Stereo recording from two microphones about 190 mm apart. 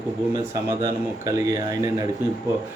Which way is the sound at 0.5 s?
20° right (ahead or behind).